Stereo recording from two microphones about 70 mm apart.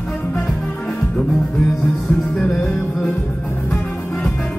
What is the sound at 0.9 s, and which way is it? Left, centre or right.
Music, centre.